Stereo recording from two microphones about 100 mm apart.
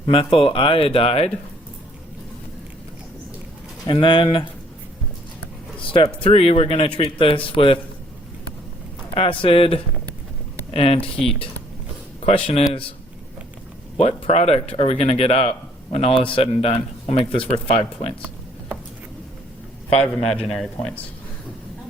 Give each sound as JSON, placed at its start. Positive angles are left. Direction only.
{"t": 0.0, "sound": "speech", "side_deg": 60}
{"t": 3.8, "sound": "speech", "side_deg": 55}
{"t": 5.8, "sound": "speech", "side_deg": 60}
{"t": 6.2, "sound": "speech", "side_deg": 85}
{"t": 9.1, "sound": "speech", "side_deg": 65}
{"t": 10.8, "sound": "speech", "side_deg": 85}
{"t": 11.0, "sound": "a man's voice", "side_deg": 5}
{"t": 14.0, "sound": "speech", "side_deg": 90}
{"t": 20.0, "sound": "a man's voice", "side_deg": 10}